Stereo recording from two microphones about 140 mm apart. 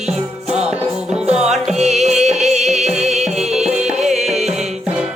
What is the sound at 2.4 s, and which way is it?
Music, centre (ahead or behind).